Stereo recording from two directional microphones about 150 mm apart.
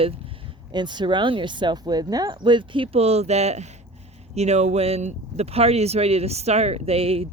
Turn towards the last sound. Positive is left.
turn(degrees=-40)  # may be behind; listen again after turning